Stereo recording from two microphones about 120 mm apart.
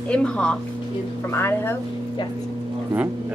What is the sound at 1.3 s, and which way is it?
Speech, 20° left (ahead or behind).